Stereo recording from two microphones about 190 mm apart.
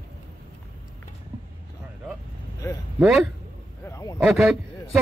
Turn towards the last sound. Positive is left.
turn(degrees=0)  # may be behind; listen again after turning